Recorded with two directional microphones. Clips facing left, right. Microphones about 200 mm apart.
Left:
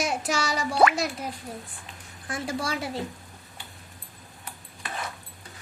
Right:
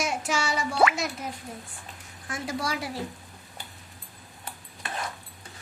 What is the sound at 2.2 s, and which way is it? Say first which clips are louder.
Speech: left 1 dB; 30° left (ahead or behind).